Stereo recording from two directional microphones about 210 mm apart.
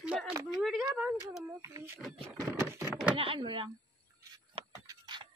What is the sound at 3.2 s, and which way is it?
Speech, 25° right (ahead or behind).